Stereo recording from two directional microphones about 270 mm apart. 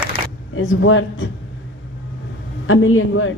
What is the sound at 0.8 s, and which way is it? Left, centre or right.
Speech, left.